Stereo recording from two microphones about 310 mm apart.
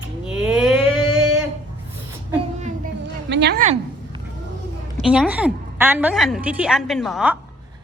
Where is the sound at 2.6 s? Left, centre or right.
Right.